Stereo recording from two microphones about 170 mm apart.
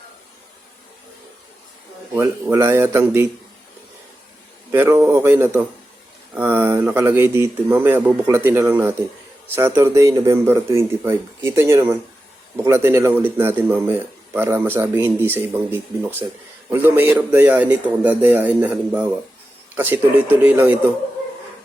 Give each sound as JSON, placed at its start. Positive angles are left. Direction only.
{"t": 2.1, "sound": "speech", "side_deg": -10}
{"t": 4.7, "sound": "speech", "side_deg": -15}